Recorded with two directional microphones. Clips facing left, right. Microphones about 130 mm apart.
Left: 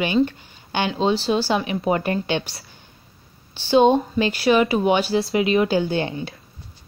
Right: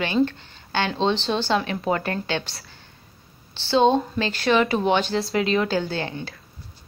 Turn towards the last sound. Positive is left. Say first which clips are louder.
# left 5 dB
turn(degrees=20)  # may be behind; listen again after turning